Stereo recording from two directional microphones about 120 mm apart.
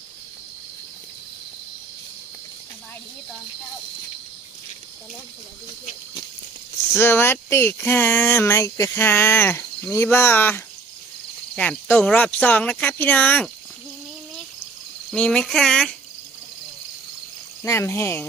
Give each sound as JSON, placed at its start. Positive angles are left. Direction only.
{"t": 6.9, "sound": "speech", "side_deg": 20}
{"t": 15.1, "sound": "speech", "side_deg": 10}
{"t": 17.6, "sound": "speech", "side_deg": 25}